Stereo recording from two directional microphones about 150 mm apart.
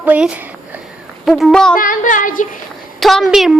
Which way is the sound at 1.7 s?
65° left (ahead or behind).